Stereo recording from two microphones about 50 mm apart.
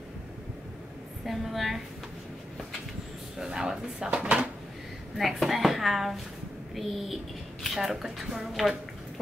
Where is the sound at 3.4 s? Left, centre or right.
Centre.